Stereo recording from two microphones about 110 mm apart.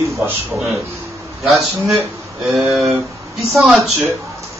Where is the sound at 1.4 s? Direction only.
Centre (ahead or behind).